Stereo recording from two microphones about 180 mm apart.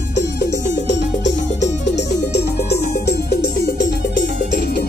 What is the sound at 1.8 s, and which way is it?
Music, 70° left (ahead or behind).